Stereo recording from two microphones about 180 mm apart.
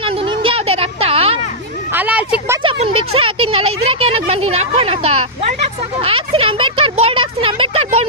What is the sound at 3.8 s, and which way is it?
Speech, 35° right (ahead or behind).